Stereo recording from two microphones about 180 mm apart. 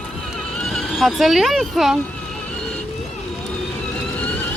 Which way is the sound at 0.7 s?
Centre (ahead or behind).